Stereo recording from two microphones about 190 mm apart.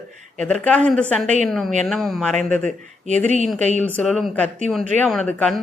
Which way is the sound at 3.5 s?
40° right (ahead or behind).